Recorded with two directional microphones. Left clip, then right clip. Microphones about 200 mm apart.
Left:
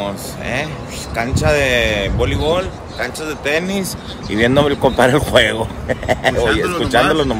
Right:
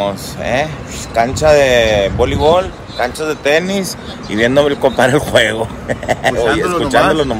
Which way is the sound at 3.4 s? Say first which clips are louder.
Right 5 dB; 15° left (ahead or behind).